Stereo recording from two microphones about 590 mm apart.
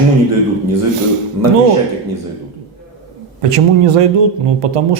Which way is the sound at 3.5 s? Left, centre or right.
Right.